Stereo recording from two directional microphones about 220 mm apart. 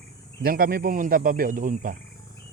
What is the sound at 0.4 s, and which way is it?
A man's voice, 40° right (ahead or behind).